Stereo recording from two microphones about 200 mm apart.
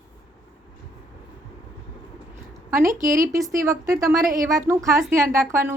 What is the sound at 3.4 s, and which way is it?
A woman's voice, 15° right (ahead or behind).